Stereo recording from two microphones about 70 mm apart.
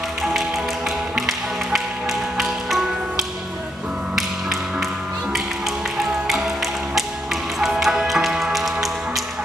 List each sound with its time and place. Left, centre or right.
1.1 s music: centre
4.1 s tap: centre
6.2 s music: centre